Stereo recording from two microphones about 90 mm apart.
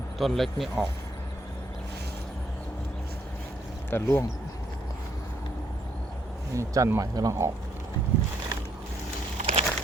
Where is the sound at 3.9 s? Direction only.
25° left (ahead or behind).